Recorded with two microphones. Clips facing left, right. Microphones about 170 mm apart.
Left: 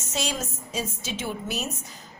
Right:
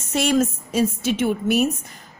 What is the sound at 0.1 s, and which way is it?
A woman's voice, 60° right (ahead or behind).